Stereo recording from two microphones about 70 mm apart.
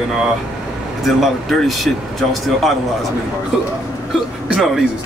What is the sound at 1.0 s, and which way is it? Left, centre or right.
Speech, centre.